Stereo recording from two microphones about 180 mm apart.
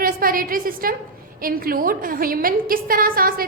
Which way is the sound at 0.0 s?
50° right (ahead or behind).